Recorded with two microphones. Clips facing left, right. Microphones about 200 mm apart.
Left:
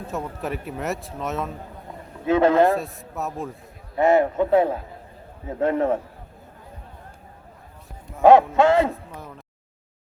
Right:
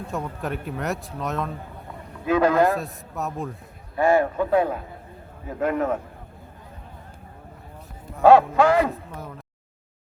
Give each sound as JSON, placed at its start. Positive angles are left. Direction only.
{"t": 0.1, "sound": "a man's voice", "side_deg": 0}
{"t": 2.2, "sound": "a man's voice", "side_deg": 25}
{"t": 2.7, "sound": "a man's voice", "side_deg": 0}
{"t": 3.9, "sound": "a man's voice", "side_deg": 20}
{"t": 8.2, "sound": "a man's voice", "side_deg": 20}